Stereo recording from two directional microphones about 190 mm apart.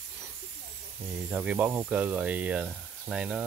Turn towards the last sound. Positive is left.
turn(degrees=-5)  # may be behind; listen again after turning